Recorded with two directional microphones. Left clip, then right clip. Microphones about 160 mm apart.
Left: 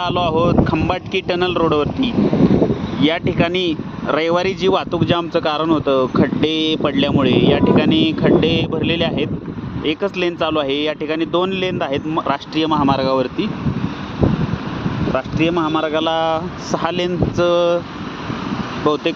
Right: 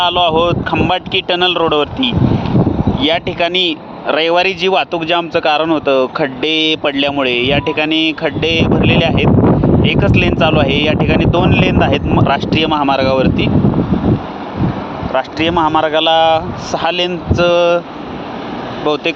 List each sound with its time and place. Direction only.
0.0 s speech: 40° left (ahead or behind)
15.1 s speech: 25° left (ahead or behind)